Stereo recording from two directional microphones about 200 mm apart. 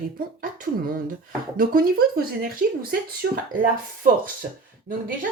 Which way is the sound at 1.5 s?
45° right (ahead or behind).